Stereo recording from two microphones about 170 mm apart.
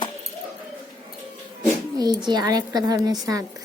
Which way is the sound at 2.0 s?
25° right (ahead or behind).